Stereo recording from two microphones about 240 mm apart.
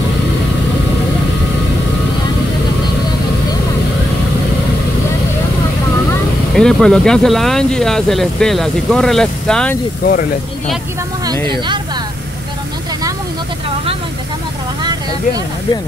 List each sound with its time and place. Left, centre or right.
6.5 s speech: centre
14.8 s vehicle: centre